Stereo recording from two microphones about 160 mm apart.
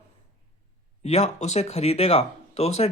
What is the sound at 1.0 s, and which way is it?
Speech, 40° left (ahead or behind).